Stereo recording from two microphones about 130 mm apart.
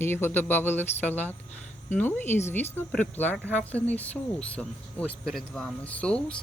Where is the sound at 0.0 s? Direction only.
15° left (ahead or behind).